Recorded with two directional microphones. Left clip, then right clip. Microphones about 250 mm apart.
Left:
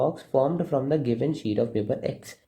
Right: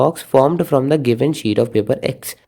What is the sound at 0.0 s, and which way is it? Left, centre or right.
Speech, right.